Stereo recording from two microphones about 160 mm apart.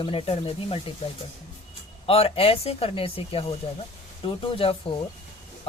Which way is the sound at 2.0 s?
35° left (ahead or behind).